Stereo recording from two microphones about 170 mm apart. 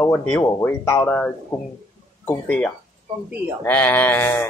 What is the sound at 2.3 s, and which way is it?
Speech, 5° left (ahead or behind).